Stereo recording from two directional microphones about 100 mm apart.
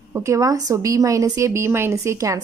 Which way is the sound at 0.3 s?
35° right (ahead or behind).